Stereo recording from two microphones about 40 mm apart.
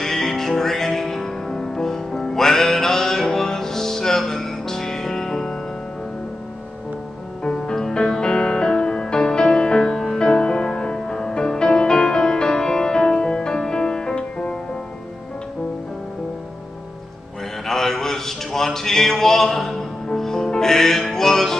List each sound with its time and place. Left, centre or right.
0.0 s music: centre
7.4 s music: centre
17.6 s a sound: centre